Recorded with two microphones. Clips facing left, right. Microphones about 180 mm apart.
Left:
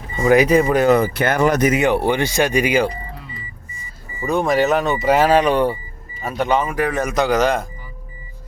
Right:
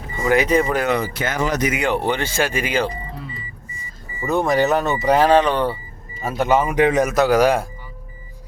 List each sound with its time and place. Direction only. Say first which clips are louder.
0.2 s speech: left 4 dB; 15° left (ahead or behind)
0.9 s speech: left 6 dB; 50° left (ahead or behind)
1.9 s speech: left 3 dB; 15° left (ahead or behind)
4.3 s speech: left 1 dB; centre (ahead or behind)
6.2 s speech: right 1 dB; 5° right (ahead or behind)
6.7 s a man's voice: right 4 dB; 20° right (ahead or behind)
7.0 s a man's voice: right 2 dB; 5° right (ahead or behind)